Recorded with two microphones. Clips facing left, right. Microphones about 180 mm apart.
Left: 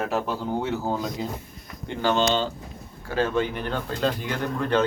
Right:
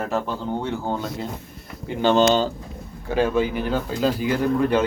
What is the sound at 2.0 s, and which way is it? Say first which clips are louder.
Speech: right 5 dB; 20° right (ahead or behind).